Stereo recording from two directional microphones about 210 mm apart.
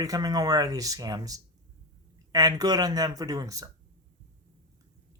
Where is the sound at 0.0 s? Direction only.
15° right (ahead or behind).